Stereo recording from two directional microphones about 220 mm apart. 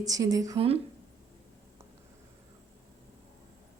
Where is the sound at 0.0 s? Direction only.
15° right (ahead or behind).